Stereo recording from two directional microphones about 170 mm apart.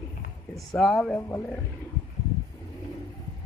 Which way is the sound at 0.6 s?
Centre (ahead or behind).